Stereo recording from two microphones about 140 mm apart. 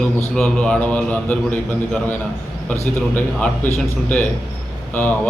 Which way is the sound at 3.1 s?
10° left (ahead or behind).